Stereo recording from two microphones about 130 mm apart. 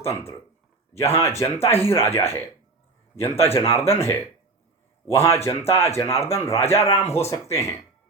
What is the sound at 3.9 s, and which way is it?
A man's voice, 20° left (ahead or behind).